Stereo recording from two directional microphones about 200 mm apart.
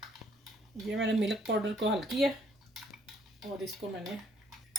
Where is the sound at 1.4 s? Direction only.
60° right (ahead or behind).